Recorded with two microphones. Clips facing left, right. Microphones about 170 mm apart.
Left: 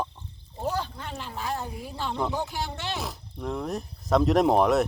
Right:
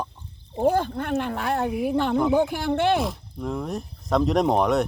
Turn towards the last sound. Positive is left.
turn(degrees=0)  # may be behind; listen again after turning